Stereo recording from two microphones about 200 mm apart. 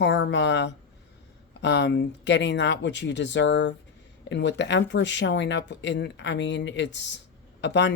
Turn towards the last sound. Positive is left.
turn(degrees=60)  # may be behind; listen again after turning